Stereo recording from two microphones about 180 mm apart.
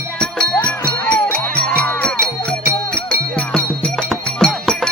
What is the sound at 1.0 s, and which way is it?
Music, 5° left (ahead or behind).